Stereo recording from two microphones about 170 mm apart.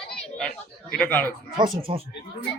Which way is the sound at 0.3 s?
5° left (ahead or behind).